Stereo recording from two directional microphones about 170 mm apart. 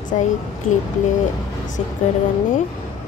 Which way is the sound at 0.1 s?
40° left (ahead or behind).